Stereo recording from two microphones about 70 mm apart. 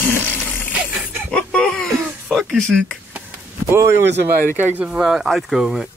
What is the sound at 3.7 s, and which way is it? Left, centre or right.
Speech, right.